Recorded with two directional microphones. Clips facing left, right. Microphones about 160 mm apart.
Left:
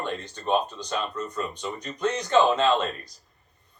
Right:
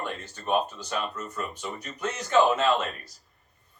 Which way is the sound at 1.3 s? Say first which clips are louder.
Left 3 dB; 10° right (ahead or behind).